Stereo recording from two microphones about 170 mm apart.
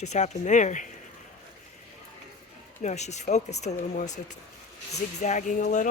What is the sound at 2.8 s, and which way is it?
Speech, 40° left (ahead or behind).